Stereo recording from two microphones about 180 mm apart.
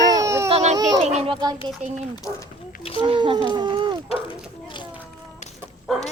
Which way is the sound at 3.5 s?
25° right (ahead or behind).